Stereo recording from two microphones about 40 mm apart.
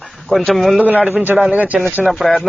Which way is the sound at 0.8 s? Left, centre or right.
Right.